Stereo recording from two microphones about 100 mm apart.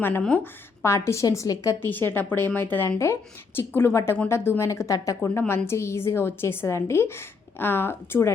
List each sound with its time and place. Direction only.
0.2 s speech: 10° left (ahead or behind)
0.8 s a woman's voice: 25° left (ahead or behind)
1.8 s a woman's voice: 20° left (ahead or behind)